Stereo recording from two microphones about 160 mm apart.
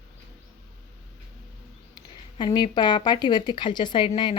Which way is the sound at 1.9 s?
25° left (ahead or behind).